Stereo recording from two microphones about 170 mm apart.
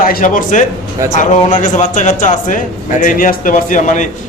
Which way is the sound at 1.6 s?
45° left (ahead or behind).